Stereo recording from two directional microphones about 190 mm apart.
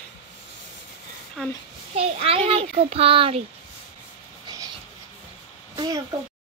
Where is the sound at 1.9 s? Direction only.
30° right (ahead or behind).